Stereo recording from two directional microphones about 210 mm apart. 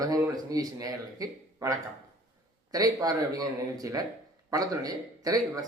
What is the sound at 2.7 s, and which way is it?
Speech, 15° right (ahead or behind).